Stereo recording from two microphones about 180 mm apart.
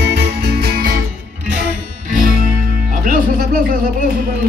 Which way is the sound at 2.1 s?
50° right (ahead or behind).